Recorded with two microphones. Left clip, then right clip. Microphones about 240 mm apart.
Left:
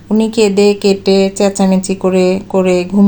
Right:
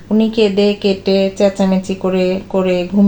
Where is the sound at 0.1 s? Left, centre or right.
Left.